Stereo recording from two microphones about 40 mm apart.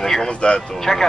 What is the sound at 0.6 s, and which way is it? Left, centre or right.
Speech, centre.